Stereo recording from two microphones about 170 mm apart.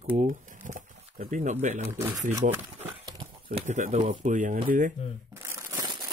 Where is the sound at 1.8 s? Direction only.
15° right (ahead or behind).